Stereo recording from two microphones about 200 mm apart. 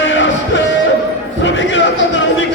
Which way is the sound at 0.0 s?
65° left (ahead or behind).